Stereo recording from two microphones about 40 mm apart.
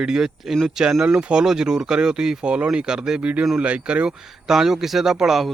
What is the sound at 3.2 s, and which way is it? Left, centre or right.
Speech, right.